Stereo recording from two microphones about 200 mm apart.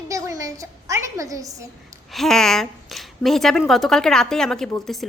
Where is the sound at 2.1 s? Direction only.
Centre (ahead or behind).